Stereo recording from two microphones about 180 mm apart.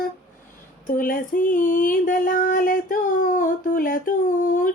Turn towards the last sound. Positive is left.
turn(degrees=45)  # may be behind; listen again after turning